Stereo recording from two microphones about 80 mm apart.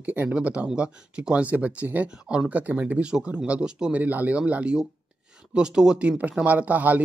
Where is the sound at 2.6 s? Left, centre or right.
Right.